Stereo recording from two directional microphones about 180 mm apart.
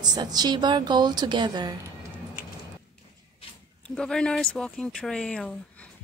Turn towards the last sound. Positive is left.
turn(degrees=5)  # may be behind; listen again after turning